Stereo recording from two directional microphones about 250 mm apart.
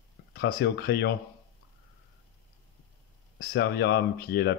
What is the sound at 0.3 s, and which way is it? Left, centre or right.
Speech, left.